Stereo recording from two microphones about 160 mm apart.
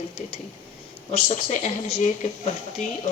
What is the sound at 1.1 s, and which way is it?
Speech, 40° left (ahead or behind).